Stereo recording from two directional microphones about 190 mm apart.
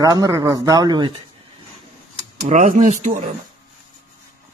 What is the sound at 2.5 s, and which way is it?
Speech, 40° right (ahead or behind).